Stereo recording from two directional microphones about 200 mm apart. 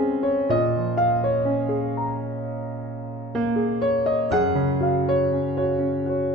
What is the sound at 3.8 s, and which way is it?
Music, centre (ahead or behind).